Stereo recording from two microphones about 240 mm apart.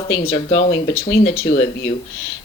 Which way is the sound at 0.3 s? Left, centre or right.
Left.